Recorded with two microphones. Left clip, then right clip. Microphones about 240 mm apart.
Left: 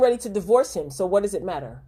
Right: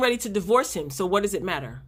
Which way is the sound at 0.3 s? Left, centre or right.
Right.